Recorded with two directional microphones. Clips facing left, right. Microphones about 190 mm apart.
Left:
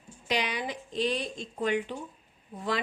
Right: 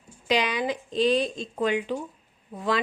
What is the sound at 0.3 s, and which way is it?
A woman's voice, 90° right.